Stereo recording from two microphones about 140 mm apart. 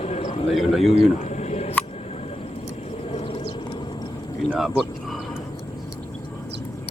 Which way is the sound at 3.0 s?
50° left (ahead or behind).